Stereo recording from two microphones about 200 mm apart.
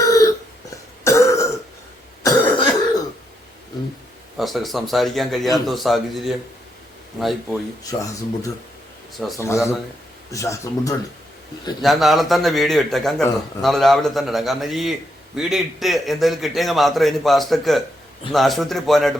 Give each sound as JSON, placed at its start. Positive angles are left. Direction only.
{"t": 0.0, "sound": "a sound", "side_deg": 15}
{"t": 1.0, "sound": "burping", "side_deg": 15}
{"t": 2.2, "sound": "cough", "side_deg": 20}
{"t": 4.4, "sound": "speech", "side_deg": 0}
{"t": 9.3, "sound": "speech", "side_deg": 15}
{"t": 11.8, "sound": "speech", "side_deg": 0}